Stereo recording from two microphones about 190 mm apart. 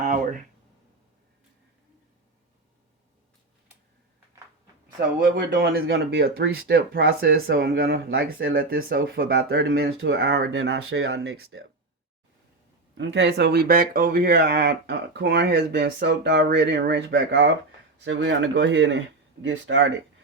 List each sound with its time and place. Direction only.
0.0 s a sound: 40° right (ahead or behind)
5.5 s speech: 50° right (ahead or behind); by 7.3 s 90° right
7.3 s speech: 60° right (ahead or behind); by 11.6 s 90° right
13.0 s speech: 70° right (ahead or behind)